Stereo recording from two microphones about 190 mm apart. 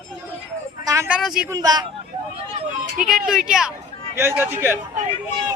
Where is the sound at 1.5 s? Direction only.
20° right (ahead or behind).